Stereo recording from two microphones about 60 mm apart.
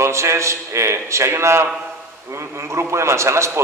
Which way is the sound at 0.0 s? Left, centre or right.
Right.